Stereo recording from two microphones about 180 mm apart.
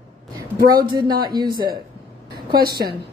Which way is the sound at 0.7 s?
25° right (ahead or behind).